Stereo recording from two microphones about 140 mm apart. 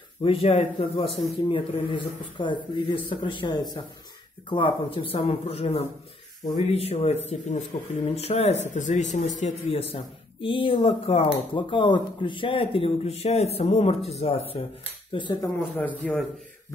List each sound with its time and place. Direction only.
0.2 s a man's voice: 45° left (ahead or behind)
9.7 s speech: 40° left (ahead or behind)
15.1 s a man's voice: 30° left (ahead or behind)
16.0 s speech: 5° left (ahead or behind)